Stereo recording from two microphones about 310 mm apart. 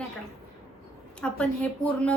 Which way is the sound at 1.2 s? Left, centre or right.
Centre.